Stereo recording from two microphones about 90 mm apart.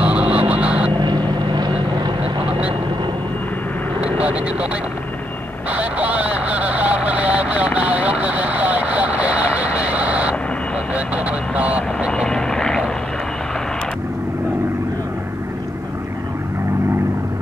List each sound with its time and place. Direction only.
0.0 s vehicle: 15° right (ahead or behind)
0.9 s vehicle: 50° right (ahead or behind)
5.7 s vehicle: 15° right (ahead or behind)
12.1 s vehicle: 10° left (ahead or behind)